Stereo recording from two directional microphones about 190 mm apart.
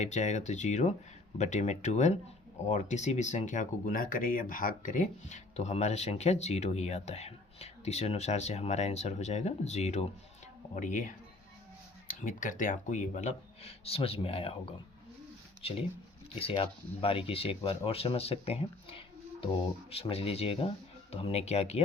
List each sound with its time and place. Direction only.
0.0 s speech: 35° left (ahead or behind)
12.2 s speech: 45° left (ahead or behind)